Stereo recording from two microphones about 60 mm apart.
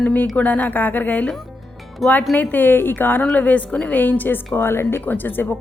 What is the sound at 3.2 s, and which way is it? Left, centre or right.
Speech, left.